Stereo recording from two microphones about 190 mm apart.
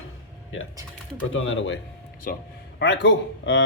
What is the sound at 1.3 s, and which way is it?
Speech, 90° left.